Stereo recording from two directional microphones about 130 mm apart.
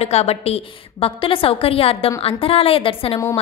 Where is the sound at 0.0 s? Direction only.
55° left (ahead or behind).